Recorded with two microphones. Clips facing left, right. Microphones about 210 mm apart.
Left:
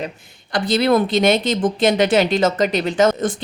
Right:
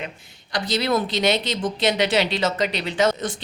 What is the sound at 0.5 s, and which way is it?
A woman's voice, 55° left (ahead or behind).